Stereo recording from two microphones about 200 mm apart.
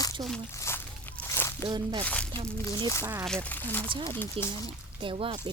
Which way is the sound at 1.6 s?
20° right (ahead or behind).